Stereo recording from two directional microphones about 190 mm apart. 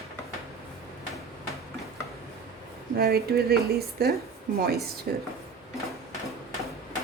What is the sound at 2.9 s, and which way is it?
Speech, 55° right (ahead or behind).